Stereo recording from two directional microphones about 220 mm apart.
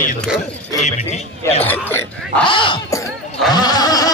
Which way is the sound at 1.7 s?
10° left (ahead or behind).